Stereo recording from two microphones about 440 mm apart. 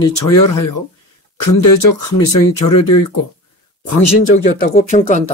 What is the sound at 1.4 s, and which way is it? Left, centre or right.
Speech, left.